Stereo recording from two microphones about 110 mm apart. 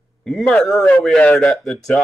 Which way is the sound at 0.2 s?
5° left (ahead or behind).